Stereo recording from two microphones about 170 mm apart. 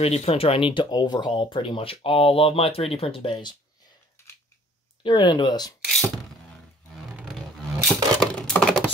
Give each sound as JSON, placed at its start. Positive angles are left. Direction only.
{"t": 0.0, "sound": "speech", "side_deg": 40}
{"t": 5.0, "sound": "speech", "side_deg": 30}
{"t": 7.2, "sound": "roar", "side_deg": -5}
{"t": 8.2, "sound": "typing", "side_deg": 5}